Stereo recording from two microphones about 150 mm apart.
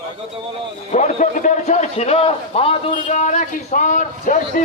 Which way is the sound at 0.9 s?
50° left (ahead or behind).